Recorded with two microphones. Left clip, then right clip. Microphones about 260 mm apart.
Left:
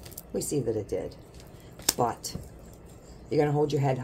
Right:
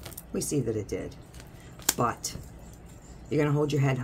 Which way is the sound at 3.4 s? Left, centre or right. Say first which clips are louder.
Left 2 dB; right.